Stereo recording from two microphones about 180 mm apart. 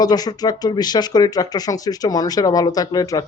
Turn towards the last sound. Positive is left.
turn(degrees=20)  # may be behind; listen again after turning